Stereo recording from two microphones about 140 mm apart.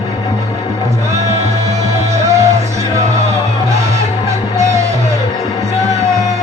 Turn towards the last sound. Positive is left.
turn(degrees=-25)  # may be behind; listen again after turning